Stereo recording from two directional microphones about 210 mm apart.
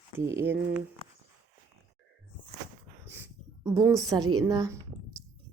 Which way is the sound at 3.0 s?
10° right (ahead or behind).